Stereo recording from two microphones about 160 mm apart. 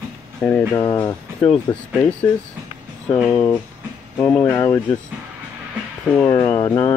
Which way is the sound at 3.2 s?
5° left (ahead or behind).